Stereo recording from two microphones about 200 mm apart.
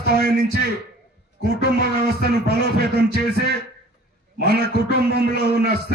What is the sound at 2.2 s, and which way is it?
A man's voice, 55° right (ahead or behind).